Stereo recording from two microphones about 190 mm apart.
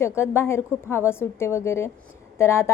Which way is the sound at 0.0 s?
15° left (ahead or behind).